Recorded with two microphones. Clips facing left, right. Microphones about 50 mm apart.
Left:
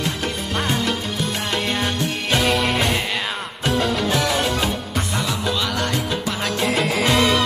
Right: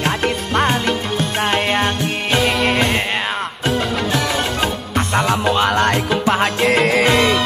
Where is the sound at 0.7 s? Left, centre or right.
Right.